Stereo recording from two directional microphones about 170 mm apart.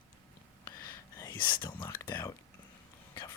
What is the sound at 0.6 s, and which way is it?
Whispering, 20° left (ahead or behind).